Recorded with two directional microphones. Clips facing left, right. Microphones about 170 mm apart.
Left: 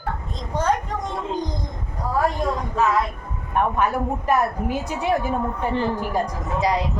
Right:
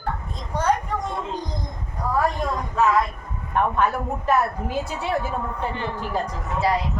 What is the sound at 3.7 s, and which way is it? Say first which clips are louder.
A woman's voice: left 1 dB; 10° left (ahead or behind).